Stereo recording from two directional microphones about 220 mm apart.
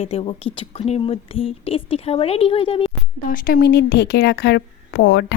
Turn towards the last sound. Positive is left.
turn(degrees=55)  # may be behind; listen again after turning